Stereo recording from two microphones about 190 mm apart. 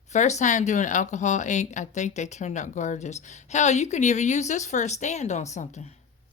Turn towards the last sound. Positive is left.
turn(degrees=35)  # may be behind; listen again after turning